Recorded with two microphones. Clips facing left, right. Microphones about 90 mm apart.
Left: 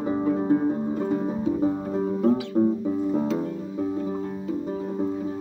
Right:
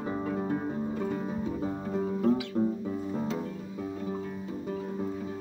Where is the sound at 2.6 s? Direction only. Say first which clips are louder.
Left 7 dB; 30° left (ahead or behind).